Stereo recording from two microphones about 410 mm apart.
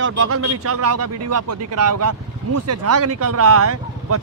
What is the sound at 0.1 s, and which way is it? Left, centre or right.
Speech, right.